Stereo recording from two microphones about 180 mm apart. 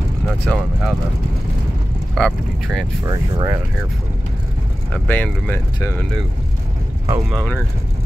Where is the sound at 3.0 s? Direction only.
20° right (ahead or behind).